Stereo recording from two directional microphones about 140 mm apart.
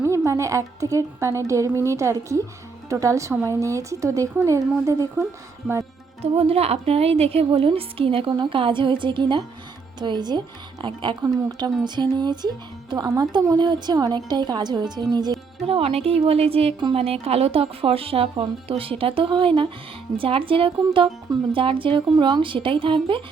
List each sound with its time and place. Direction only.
0.3 s speech: 20° right (ahead or behind)
6.2 s speech: 45° right (ahead or behind); by 15.4 s 30° right (ahead or behind)
15.6 s a woman's voice: 45° right (ahead or behind)